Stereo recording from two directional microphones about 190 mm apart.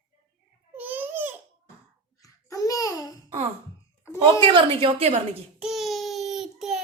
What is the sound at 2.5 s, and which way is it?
Babbling, 15° left (ahead or behind).